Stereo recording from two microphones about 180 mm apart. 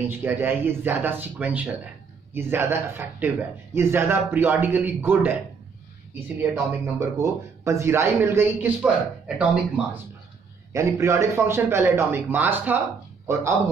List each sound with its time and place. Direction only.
0.1 s a man's voice: 10° right (ahead or behind)